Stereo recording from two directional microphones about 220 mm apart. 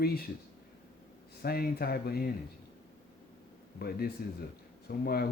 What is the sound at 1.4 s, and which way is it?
Speech, 45° left (ahead or behind).